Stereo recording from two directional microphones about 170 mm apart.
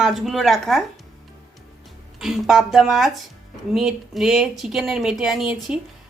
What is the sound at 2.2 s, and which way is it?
Speech, centre (ahead or behind).